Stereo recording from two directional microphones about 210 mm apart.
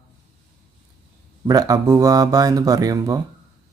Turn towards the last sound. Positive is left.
turn(degrees=-15)  # may be behind; listen again after turning